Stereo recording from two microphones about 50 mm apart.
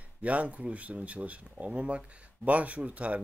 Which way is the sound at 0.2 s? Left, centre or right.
Right.